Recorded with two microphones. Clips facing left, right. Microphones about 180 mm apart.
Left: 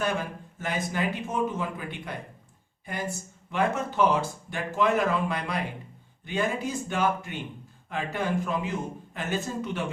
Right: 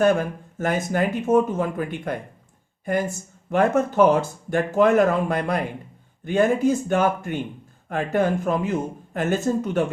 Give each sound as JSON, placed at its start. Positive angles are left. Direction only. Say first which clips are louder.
{"t": 0.0, "sound": "speech", "louder": "right 10 dB", "side_deg": -50}